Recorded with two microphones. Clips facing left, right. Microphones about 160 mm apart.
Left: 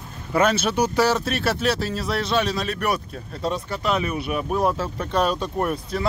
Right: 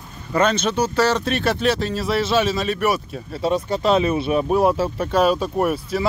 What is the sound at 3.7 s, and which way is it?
Speech, 25° right (ahead or behind).